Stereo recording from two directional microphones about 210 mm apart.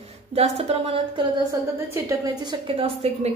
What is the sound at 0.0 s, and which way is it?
A woman's voice, 30° right (ahead or behind).